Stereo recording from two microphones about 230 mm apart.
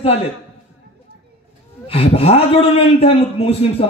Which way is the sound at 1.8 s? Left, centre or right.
Left.